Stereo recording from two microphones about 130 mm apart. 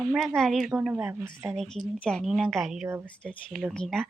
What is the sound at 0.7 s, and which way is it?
Speech, 15° right (ahead or behind).